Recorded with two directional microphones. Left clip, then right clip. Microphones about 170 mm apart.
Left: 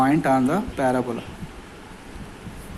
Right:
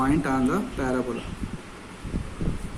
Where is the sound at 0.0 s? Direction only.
30° left (ahead or behind).